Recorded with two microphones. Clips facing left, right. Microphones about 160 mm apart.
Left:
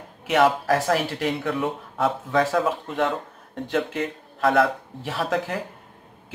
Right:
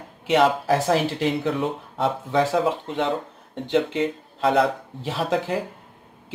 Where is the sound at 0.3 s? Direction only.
25° right (ahead or behind).